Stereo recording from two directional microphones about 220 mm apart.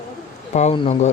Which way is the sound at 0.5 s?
25° left (ahead or behind).